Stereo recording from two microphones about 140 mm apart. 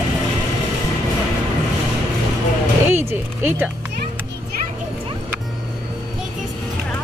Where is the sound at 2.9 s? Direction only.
15° right (ahead or behind).